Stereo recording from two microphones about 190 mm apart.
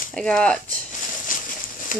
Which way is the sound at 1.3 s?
45° left (ahead or behind).